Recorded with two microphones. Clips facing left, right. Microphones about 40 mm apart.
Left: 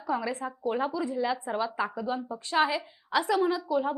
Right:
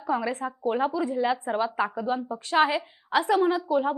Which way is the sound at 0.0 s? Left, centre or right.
Right.